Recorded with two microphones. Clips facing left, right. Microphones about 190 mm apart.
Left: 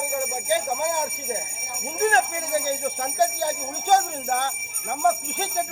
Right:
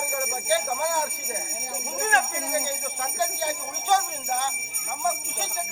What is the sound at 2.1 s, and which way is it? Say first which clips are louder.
Speech: left 4 dB; 40° left (ahead or behind).